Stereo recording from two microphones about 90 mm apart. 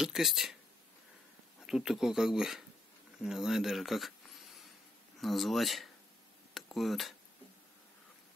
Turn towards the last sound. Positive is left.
turn(degrees=0)  # may be behind; listen again after turning